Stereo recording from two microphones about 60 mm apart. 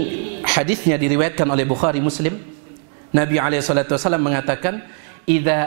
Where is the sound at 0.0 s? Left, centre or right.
Centre.